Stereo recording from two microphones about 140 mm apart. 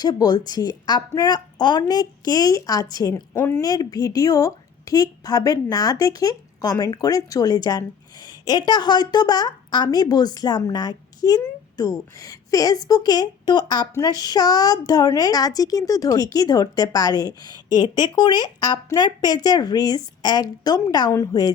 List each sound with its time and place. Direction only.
0.0 s a woman's voice: 30° left (ahead or behind)